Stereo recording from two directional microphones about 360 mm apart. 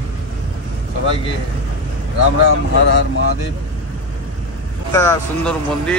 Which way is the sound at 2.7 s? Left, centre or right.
Left.